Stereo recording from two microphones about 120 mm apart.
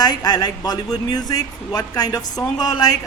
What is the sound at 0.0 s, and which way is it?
A woman's voice, 35° left (ahead or behind).